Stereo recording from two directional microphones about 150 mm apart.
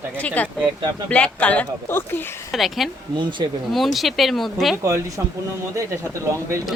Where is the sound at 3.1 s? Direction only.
30° right (ahead or behind).